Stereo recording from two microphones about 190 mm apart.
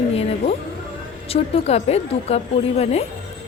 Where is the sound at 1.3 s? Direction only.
35° left (ahead or behind).